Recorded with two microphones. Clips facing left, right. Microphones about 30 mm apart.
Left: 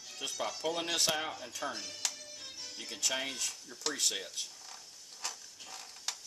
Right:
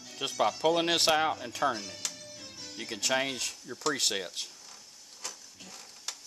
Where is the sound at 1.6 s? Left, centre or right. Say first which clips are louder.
Right 10 dB; right.